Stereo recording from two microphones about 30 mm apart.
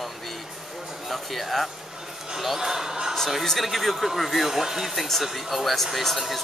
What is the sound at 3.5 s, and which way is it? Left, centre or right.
Speech, centre.